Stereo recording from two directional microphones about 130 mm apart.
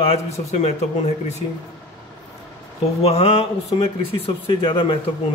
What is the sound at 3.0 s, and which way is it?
Speech, 50° left (ahead or behind).